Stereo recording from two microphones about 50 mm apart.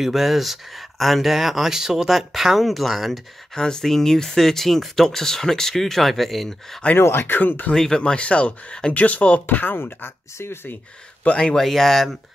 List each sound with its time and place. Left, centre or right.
0.0 s speech: centre
3.5 s speech: centre
7.0 s speech: left
7.3 s speech: left
7.7 s speech: centre; by 10.8 s left
11.2 s speech: left
11.5 s speech: centre